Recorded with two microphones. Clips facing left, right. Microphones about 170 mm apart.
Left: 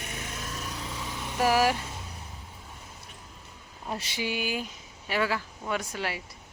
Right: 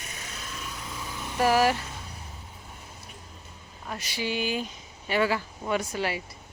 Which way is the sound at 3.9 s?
25° left (ahead or behind).